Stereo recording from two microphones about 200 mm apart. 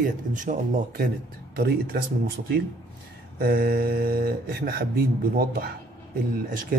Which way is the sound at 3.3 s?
50° right (ahead or behind).